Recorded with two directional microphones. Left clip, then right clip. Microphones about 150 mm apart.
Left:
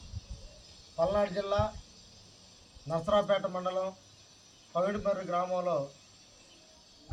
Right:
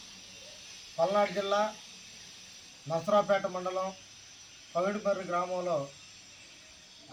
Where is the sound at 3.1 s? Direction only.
20° left (ahead or behind).